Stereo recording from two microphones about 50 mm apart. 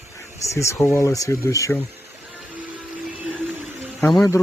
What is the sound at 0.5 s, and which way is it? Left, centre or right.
Speech, left.